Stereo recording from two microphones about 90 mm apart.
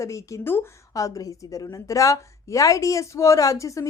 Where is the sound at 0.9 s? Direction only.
40° left (ahead or behind).